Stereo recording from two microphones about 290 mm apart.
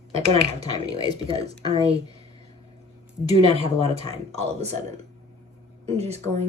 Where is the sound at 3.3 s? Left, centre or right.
Centre.